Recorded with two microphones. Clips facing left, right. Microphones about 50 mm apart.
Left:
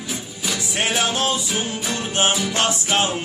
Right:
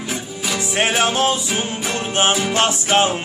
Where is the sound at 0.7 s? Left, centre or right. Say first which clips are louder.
Right 4 dB; right.